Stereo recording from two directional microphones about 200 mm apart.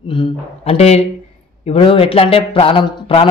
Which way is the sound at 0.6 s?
30° left (ahead or behind).